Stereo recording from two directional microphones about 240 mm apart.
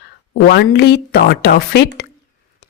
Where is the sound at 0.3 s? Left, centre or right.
Left.